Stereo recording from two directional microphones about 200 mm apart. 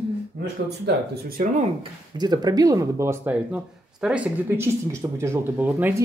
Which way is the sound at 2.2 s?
20° right (ahead or behind).